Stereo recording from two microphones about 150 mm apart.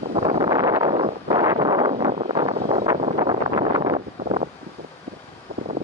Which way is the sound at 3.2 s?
30° right (ahead or behind).